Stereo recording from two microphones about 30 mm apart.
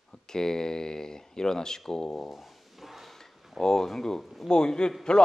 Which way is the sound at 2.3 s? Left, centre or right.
Centre.